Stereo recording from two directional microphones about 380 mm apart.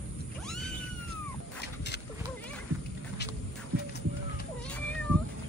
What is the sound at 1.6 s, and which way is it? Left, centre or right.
Dog, left.